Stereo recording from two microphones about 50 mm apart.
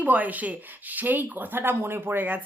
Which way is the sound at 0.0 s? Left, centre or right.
Right.